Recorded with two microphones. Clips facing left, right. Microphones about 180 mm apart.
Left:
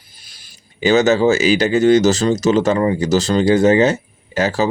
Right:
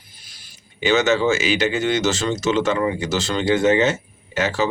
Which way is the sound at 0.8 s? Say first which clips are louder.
Left 5 dB; 40° left (ahead or behind).